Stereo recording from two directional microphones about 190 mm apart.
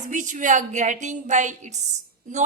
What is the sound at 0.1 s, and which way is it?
A woman's voice, 40° right (ahead or behind).